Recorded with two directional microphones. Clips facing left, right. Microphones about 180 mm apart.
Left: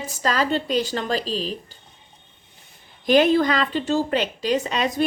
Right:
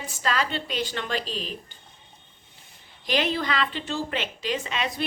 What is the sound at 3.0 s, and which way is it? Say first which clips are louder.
A woman's voice: left 9 dB; 45° left (ahead or behind).